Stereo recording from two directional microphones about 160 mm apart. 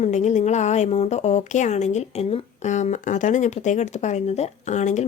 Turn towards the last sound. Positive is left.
turn(degrees=45)  # may be behind; listen again after turning